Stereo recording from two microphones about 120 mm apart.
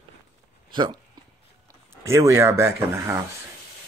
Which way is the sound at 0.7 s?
40° right (ahead or behind).